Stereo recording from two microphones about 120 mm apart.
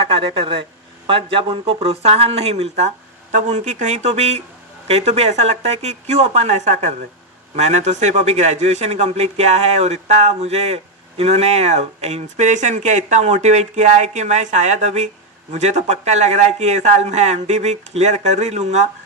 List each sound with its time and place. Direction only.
0.1 s speech: 50° right (ahead or behind); by 2.9 s 65° right (ahead or behind)
3.3 s speech: 85° right